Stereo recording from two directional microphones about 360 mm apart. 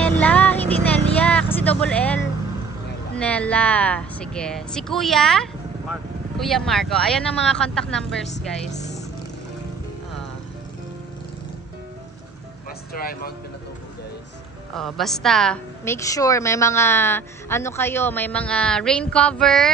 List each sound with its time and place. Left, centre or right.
0.0 s vehicle: centre
3.2 s speech: centre
12.9 s speech: left
14.7 s speech: centre